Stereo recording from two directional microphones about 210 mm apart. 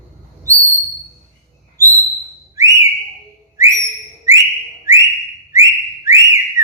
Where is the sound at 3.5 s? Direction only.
15° right (ahead or behind).